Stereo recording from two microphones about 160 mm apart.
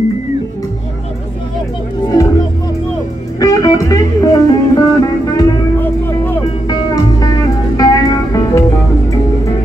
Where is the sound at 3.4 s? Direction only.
20° left (ahead or behind).